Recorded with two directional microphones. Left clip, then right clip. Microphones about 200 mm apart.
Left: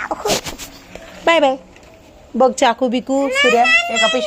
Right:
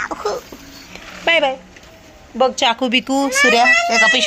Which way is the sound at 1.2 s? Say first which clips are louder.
Left 2 dB; 35° left (ahead or behind).